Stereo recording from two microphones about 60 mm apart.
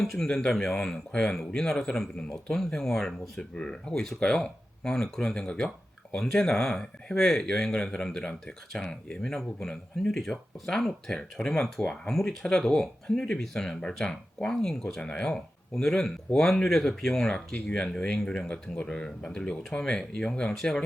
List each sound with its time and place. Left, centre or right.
0.0 s speech: centre
17.5 s speech: left